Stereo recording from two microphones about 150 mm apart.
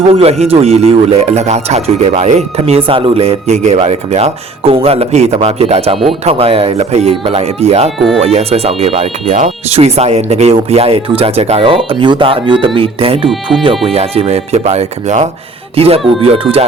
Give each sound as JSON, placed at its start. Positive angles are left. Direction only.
{"t": 0.1, "sound": "speech", "side_deg": -40}
{"t": 13.2, "sound": "speech", "side_deg": 0}
{"t": 13.8, "sound": "speech", "side_deg": -40}